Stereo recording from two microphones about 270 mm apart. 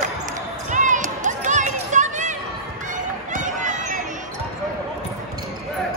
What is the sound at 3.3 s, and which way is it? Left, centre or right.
Run, right.